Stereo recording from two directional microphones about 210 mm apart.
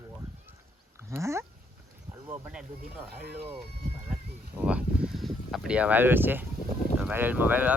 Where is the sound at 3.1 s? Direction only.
50° right (ahead or behind).